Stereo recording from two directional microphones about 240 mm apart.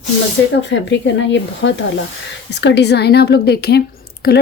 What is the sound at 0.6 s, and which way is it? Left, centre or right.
A woman's voice, left.